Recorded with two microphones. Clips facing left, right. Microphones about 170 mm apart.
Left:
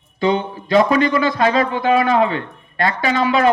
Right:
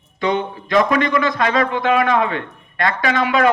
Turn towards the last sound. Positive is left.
turn(degrees=30)  # may be behind; listen again after turning